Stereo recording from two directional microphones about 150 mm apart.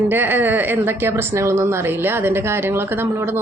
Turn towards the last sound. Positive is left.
turn(degrees=-15)  # may be behind; listen again after turning